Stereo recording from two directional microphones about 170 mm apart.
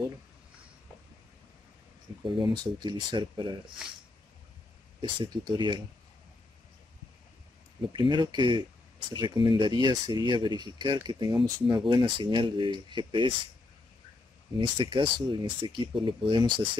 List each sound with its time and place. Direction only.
2.2 s speech: 30° right (ahead or behind)
5.0 s speech: 25° right (ahead or behind)
7.9 s speech: 30° right (ahead or behind)
14.6 s speech: 30° right (ahead or behind)